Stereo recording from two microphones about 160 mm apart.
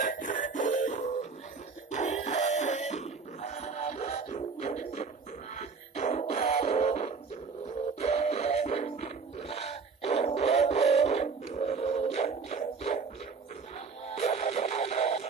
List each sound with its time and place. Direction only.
0.0 s music: 55° left (ahead or behind)
14.1 s music: 40° left (ahead or behind)